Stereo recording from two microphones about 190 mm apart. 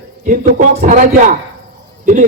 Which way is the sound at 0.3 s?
45° right (ahead or behind).